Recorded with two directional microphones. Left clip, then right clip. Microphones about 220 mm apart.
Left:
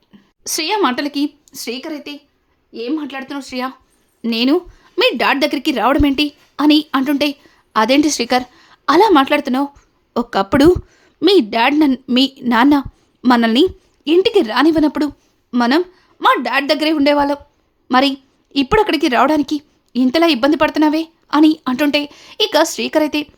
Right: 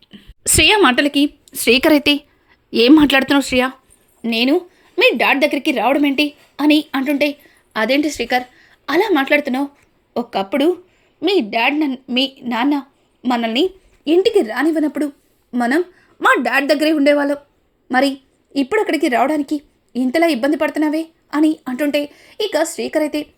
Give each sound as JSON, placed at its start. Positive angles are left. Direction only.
{"t": 0.1, "sound": "a sound", "side_deg": -5}
{"t": 1.6, "sound": "speech", "side_deg": -30}
{"t": 3.6, "sound": "speech", "side_deg": -10}
{"t": 4.2, "sound": "a woman's voice", "side_deg": 10}
{"t": 14.0, "sound": "a woman's voice", "side_deg": 10}
{"t": 16.0, "sound": "a woman's voice", "side_deg": -5}